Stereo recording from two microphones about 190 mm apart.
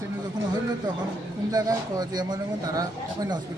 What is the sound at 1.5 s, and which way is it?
A man's voice, 20° right (ahead or behind).